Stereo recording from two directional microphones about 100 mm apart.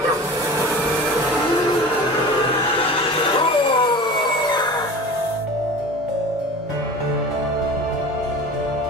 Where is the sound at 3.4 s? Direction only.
55° left (ahead or behind).